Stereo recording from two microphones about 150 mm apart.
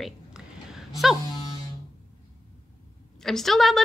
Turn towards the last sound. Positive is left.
turn(degrees=0)  # may be behind; listen again after turning